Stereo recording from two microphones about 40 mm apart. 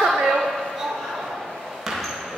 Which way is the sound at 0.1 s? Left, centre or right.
Centre.